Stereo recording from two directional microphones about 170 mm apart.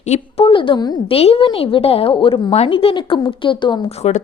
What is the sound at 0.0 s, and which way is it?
Speech, 40° left (ahead or behind).